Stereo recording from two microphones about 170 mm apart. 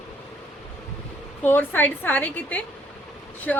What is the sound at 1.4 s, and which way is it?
Speech, 10° left (ahead or behind).